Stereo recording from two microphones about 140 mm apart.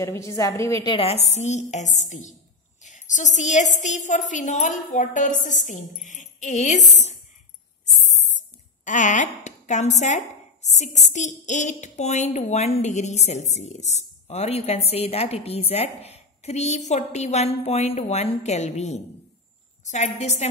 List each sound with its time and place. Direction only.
0.0 s a woman's voice: 20° left (ahead or behind)
0.8 s a woman's voice: 40° left (ahead or behind)
8.8 s a woman's voice: 65° left (ahead or behind)